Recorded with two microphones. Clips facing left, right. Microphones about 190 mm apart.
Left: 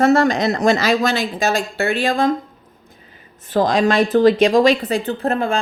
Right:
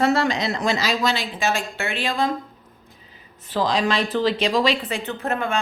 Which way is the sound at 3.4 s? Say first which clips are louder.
Left 6 dB; 50° left (ahead or behind).